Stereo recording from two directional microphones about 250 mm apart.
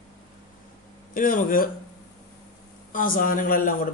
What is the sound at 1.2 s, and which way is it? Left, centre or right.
Speech, left.